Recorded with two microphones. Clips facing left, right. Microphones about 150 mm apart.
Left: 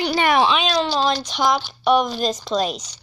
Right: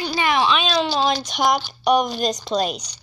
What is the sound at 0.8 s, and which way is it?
Speech, 10° right (ahead or behind).